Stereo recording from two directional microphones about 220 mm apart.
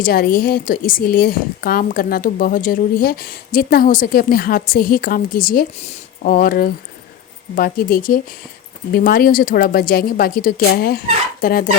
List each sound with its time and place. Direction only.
0.0 s a woman's voice: 40° left (ahead or behind)